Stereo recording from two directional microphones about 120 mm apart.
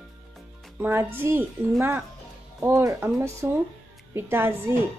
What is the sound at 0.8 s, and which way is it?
Speech, 20° right (ahead or behind).